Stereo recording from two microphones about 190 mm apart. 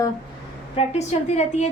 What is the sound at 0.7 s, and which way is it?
Speech, 35° left (ahead or behind).